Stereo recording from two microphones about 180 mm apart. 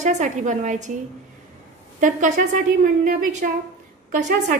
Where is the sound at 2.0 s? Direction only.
45° right (ahead or behind).